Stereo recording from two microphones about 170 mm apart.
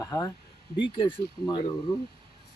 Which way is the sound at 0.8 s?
30° left (ahead or behind).